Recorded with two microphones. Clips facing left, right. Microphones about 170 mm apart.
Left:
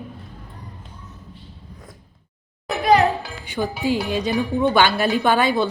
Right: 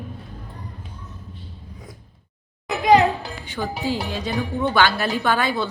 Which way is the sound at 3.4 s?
15° left (ahead or behind).